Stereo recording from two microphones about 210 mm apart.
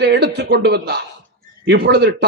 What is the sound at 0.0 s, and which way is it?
A man's voice, 50° right (ahead or behind).